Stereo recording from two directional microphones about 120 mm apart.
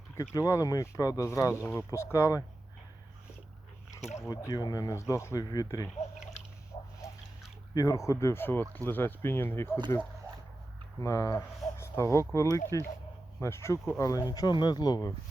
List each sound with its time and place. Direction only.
0.2 s speech: 25° left (ahead or behind)
4.3 s speech: 25° left (ahead or behind)
7.8 s speech: 25° left (ahead or behind)
11.0 s speech: 25° left (ahead or behind)